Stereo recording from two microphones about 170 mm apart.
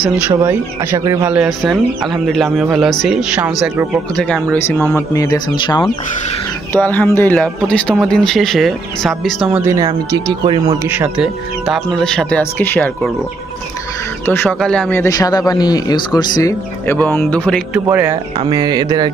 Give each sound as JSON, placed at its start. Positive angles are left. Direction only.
{"t": 0.3, "sound": "speech", "side_deg": -15}
{"t": 6.7, "sound": "speech", "side_deg": 10}
{"t": 9.7, "sound": "speech", "side_deg": -20}
{"t": 10.8, "sound": "speech", "side_deg": -10}
{"t": 14.2, "sound": "speech", "side_deg": 10}
{"t": 16.8, "sound": "speech", "side_deg": 10}
{"t": 17.7, "sound": "speech", "side_deg": -10}